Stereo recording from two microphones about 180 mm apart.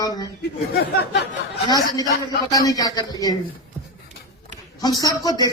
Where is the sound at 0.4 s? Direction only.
65° left (ahead or behind).